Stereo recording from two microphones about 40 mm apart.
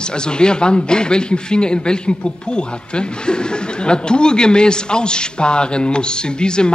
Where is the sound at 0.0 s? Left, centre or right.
Left.